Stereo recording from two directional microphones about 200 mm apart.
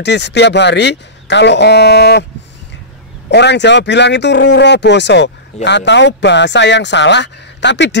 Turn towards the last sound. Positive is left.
turn(degrees=60)  # may be behind; listen again after turning